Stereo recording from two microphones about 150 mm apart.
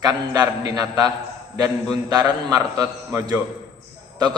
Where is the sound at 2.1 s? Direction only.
25° right (ahead or behind).